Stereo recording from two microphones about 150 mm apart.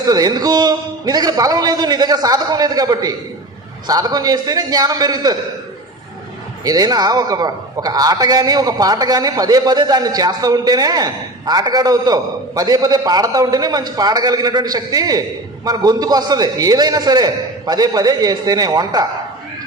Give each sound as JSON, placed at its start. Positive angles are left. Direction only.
{"t": 0.0, "sound": "a man's voice", "side_deg": -25}
{"t": 6.7, "sound": "a man's voice", "side_deg": -25}